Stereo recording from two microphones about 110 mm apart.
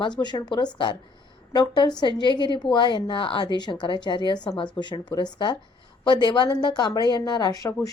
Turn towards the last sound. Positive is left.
turn(degrees=35)  # may be behind; listen again after turning